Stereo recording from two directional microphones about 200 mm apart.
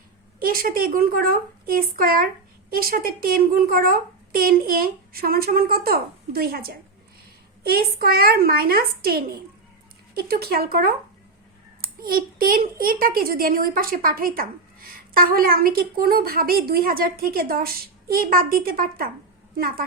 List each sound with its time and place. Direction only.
0.3 s a child's voice: 45° right (ahead or behind)
11.9 s a child's voice: 45° right (ahead or behind)